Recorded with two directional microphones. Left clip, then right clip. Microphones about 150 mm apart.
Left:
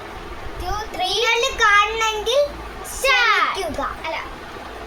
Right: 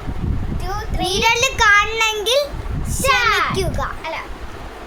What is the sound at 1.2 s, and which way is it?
Child singing, 90° right.